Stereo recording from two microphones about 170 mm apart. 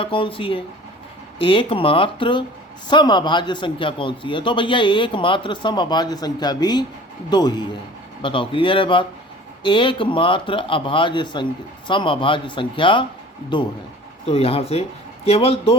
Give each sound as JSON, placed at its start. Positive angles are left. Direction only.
{"t": 0.0, "sound": "a man's voice", "side_deg": 30}